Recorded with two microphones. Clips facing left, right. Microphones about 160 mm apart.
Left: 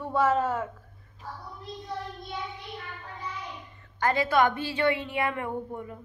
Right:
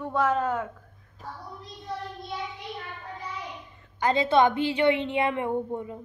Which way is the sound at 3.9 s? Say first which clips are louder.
Right 2 dB; 20° right (ahead or behind).